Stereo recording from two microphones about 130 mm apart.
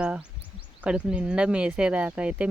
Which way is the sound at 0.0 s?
10° right (ahead or behind).